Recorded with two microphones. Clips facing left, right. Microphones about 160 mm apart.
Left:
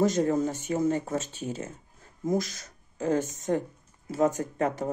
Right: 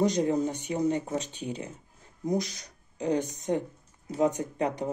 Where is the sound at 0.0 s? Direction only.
15° right (ahead or behind).